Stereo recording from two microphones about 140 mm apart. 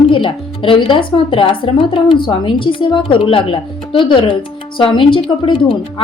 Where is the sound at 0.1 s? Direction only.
40° left (ahead or behind).